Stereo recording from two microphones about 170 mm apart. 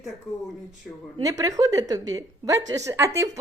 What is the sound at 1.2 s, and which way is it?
A woman's voice, 20° right (ahead or behind).